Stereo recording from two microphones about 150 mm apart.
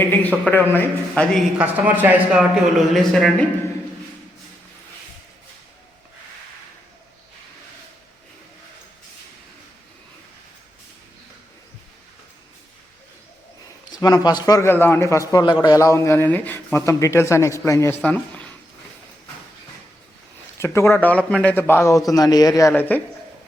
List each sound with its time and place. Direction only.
0.0 s a man's voice: 15° left (ahead or behind)
1.5 s speech: 10° right (ahead or behind)
13.9 s a man's voice: 25° left (ahead or behind); by 18.5 s 10° left (ahead or behind)
20.6 s a man's voice: 15° left (ahead or behind)
22.7 s a man's voice: 10° left (ahead or behind)